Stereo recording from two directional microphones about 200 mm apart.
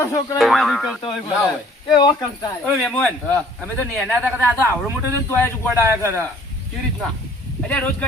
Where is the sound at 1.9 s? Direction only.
20° left (ahead or behind).